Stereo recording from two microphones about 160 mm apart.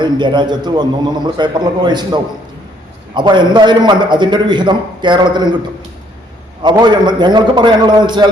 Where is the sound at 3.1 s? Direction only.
30° right (ahead or behind).